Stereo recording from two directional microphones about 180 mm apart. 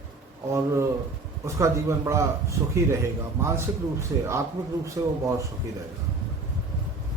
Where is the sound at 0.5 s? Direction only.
15° right (ahead or behind).